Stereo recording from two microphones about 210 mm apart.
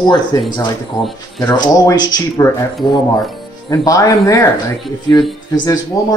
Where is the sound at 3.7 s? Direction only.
15° left (ahead or behind).